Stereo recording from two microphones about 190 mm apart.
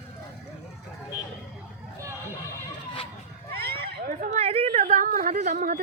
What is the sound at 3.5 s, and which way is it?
Speech, 55° right (ahead or behind).